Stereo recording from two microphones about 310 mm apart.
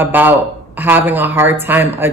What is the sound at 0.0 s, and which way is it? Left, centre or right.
A woman's voice, centre.